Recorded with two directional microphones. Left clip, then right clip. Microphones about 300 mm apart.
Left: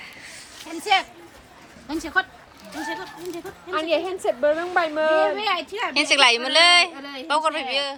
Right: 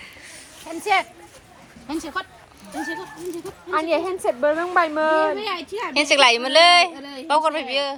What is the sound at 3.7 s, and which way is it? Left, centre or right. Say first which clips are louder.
A woman's voice: right 2 dB; centre.